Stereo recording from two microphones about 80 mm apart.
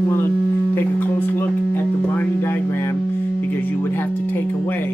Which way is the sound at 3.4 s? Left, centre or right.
Left.